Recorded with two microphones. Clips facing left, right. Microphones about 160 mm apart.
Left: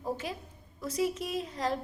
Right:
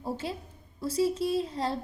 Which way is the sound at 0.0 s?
30° right (ahead or behind).